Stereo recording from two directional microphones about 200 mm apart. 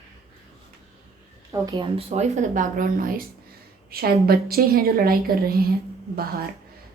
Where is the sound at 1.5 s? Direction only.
15° right (ahead or behind).